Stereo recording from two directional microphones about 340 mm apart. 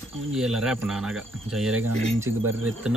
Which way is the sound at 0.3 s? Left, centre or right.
Centre.